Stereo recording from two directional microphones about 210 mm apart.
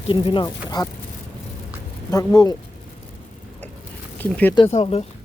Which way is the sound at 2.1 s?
20° left (ahead or behind).